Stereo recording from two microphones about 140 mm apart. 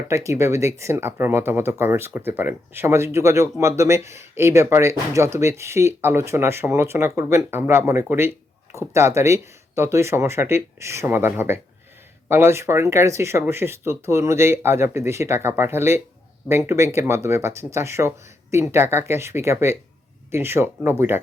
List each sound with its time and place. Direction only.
0.1 s speech: 20° right (ahead or behind)